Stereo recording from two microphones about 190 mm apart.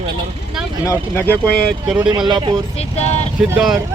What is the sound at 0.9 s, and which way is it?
Speech, 10° left (ahead or behind).